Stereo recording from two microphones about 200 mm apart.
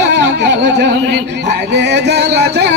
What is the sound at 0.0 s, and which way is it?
Music, 60° right (ahead or behind).